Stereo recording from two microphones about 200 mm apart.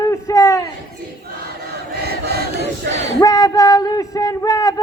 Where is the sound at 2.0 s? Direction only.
50° right (ahead or behind).